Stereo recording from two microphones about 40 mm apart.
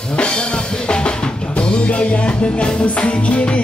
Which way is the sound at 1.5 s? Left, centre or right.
Left.